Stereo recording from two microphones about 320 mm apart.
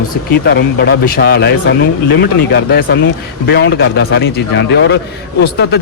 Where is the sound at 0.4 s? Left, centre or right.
Left.